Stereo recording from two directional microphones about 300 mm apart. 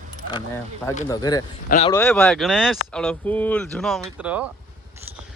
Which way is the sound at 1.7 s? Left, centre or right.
Left.